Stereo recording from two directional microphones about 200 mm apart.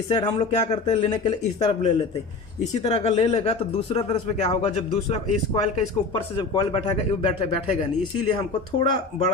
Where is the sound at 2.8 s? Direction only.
30° left (ahead or behind).